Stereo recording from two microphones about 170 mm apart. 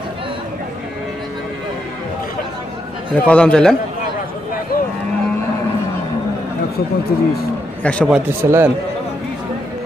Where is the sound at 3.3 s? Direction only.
5° left (ahead or behind).